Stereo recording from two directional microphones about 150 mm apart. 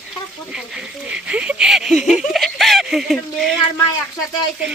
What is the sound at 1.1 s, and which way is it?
Speech, 5° right (ahead or behind).